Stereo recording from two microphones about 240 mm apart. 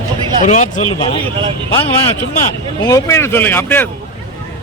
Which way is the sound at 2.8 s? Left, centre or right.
Centre.